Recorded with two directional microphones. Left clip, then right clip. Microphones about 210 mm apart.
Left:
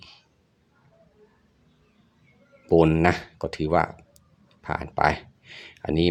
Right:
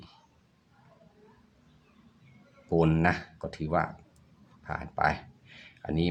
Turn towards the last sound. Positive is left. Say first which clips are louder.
# left 8 dB
turn(degrees=35)  # may be behind; listen again after turning